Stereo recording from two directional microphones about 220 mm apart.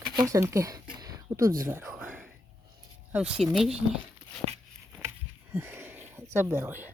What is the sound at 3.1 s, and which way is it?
Speech, 5° right (ahead or behind).